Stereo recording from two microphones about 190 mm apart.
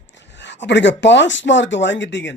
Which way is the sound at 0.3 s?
65° left (ahead or behind).